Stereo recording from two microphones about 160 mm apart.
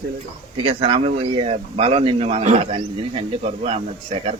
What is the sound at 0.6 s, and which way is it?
Speech, 35° right (ahead or behind).